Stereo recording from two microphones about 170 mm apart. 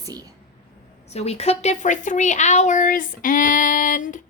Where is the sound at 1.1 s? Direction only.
40° left (ahead or behind).